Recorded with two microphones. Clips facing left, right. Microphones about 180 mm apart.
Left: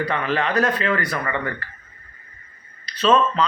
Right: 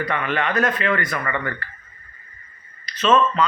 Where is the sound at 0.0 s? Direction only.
30° left (ahead or behind).